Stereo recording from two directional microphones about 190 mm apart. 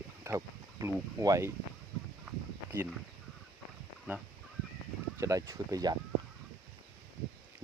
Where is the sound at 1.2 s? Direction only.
15° right (ahead or behind).